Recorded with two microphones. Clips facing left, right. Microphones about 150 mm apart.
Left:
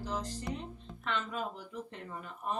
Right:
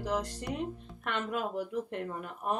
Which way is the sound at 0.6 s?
60° right (ahead or behind).